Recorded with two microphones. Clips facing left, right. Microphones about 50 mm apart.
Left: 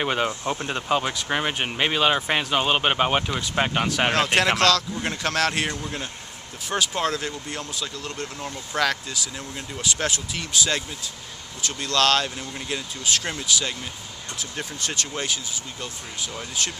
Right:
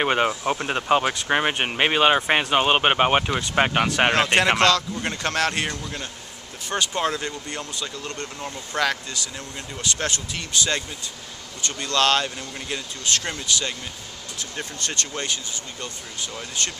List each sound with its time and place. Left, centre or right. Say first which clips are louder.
0.0 s speech: right 3 dB; right
4.1 s speech: right 2 dB; centre